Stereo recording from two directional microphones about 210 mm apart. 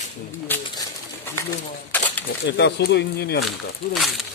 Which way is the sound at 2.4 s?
55° left (ahead or behind).